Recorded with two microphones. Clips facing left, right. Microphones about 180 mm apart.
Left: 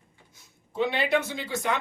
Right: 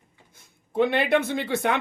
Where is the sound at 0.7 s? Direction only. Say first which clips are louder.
Right 4 dB; 55° right (ahead or behind).